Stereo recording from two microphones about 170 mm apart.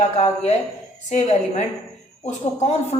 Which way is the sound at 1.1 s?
45° left (ahead or behind).